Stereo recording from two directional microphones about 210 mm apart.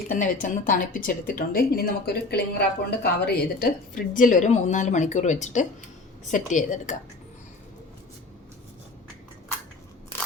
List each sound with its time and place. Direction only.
0.1 s a woman's voice: 40° left (ahead or behind)